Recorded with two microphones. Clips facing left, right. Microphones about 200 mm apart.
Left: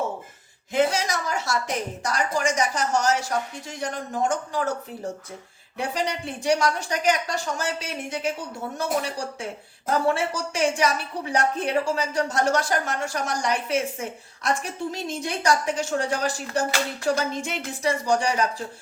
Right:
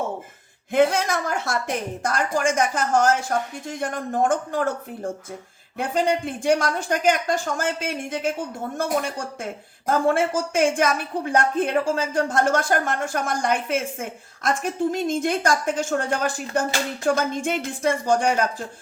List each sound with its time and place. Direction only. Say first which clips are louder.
0.7 s a woman's voice: right 3 dB; 55° right (ahead or behind)
5.7 s a woman's voice: right 5 dB; 50° right (ahead or behind)